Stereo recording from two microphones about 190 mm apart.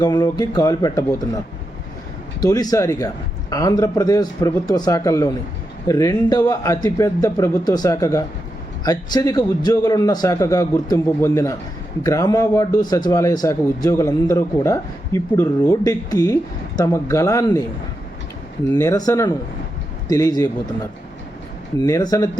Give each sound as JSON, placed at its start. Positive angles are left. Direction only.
{"t": 0.0, "sound": "a man's voice", "side_deg": 20}
{"t": 2.4, "sound": "a man's voice", "side_deg": 20}
{"t": 18.7, "sound": "speech", "side_deg": 15}
{"t": 21.8, "sound": "speech", "side_deg": 20}